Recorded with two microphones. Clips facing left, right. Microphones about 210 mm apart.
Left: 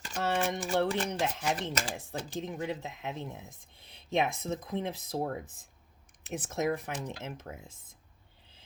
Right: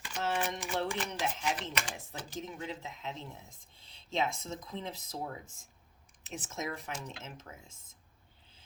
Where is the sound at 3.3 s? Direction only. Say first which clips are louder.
Left 6 dB; 20° left (ahead or behind).